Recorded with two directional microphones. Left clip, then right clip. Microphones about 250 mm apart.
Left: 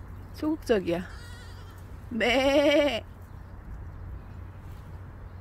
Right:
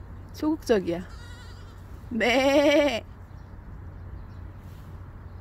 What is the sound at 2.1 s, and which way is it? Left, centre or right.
Bleat, centre.